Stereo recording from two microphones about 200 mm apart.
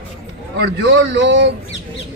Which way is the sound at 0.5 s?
60° right (ahead or behind).